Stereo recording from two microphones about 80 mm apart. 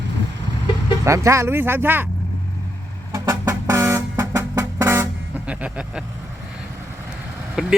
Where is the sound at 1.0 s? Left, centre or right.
Right.